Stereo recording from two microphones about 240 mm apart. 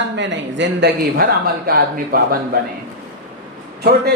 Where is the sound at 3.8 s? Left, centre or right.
Right.